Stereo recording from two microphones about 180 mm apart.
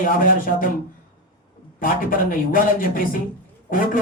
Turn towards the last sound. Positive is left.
turn(degrees=50)  # may be behind; listen again after turning